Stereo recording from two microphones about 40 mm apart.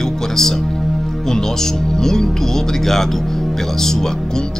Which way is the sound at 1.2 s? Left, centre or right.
Centre.